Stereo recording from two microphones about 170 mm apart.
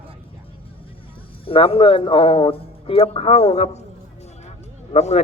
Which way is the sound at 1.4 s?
35° left (ahead or behind).